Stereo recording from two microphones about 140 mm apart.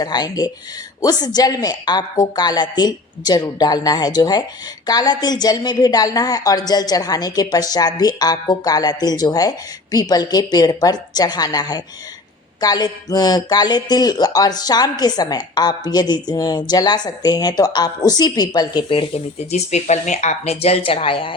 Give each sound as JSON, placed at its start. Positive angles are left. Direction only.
{"t": 0.0, "sound": "speech", "side_deg": 30}